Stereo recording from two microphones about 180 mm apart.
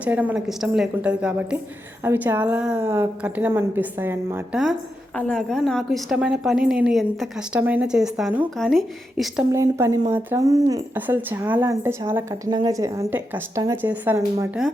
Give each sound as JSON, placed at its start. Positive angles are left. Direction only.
{"t": 0.0, "sound": "a woman's voice", "side_deg": -10}
{"t": 5.1, "sound": "a woman's voice", "side_deg": 5}
{"t": 9.5, "sound": "speech", "side_deg": -15}